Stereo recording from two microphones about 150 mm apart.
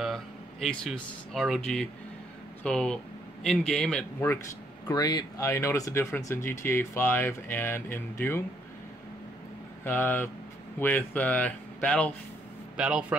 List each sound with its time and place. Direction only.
0.0 s a man's voice: centre (ahead or behind)
4.8 s speech: 25° left (ahead or behind)
9.8 s speech: 15° left (ahead or behind)
12.7 s speech: 5° right (ahead or behind)